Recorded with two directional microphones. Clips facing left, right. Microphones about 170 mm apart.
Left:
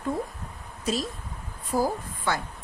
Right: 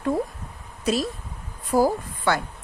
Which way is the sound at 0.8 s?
70° right (ahead or behind).